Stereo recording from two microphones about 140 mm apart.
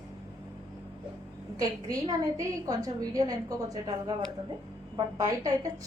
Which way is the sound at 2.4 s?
25° right (ahead or behind).